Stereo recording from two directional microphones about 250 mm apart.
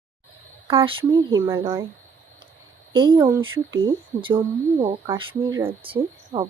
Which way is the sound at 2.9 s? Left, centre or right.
Centre.